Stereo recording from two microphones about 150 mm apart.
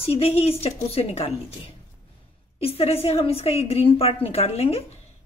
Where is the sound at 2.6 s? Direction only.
40° left (ahead or behind).